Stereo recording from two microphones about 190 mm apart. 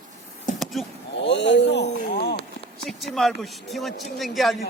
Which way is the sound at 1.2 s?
65° left (ahead or behind).